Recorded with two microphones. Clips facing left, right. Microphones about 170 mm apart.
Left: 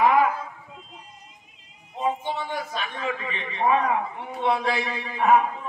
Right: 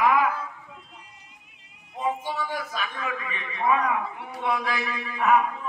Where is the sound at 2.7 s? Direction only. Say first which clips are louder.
Left 2 dB; 30° left (ahead or behind).